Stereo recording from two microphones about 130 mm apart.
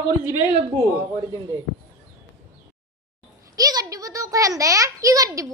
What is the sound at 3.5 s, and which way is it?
Speech, 30° right (ahead or behind).